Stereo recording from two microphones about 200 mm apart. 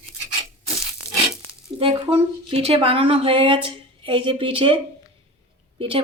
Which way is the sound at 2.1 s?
30° right (ahead or behind).